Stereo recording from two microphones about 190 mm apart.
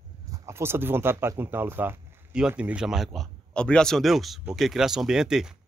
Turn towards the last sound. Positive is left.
turn(degrees=-5)  # may be behind; listen again after turning